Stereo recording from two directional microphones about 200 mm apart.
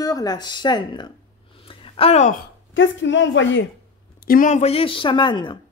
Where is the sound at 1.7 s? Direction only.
25° left (ahead or behind).